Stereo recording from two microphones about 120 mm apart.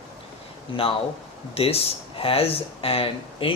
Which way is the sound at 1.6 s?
55° left (ahead or behind).